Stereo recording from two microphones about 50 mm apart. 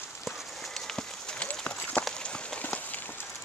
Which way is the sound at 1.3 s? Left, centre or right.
Left.